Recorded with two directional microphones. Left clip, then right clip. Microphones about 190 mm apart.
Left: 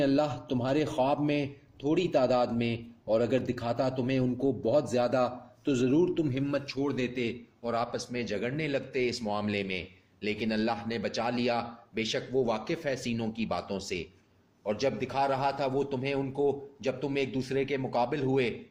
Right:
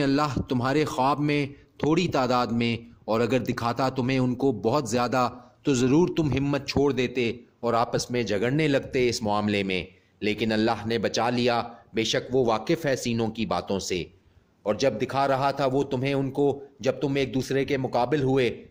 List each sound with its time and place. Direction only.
0.0 s a man's voice: 50° right (ahead or behind)